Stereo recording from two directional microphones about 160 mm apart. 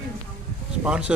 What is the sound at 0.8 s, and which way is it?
Speech, 5° right (ahead or behind).